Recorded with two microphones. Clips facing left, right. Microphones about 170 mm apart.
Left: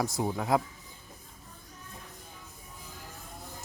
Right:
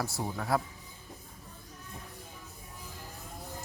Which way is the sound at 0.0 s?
20° left (ahead or behind).